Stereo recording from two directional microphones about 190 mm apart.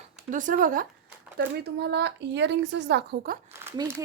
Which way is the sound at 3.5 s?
15° right (ahead or behind).